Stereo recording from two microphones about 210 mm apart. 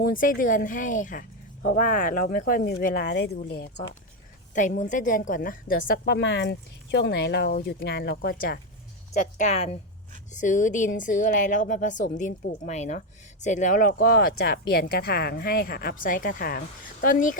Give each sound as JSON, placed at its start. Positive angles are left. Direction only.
{"t": 0.0, "sound": "a woman's voice", "side_deg": 40}
{"t": 4.5, "sound": "a woman's voice", "side_deg": 35}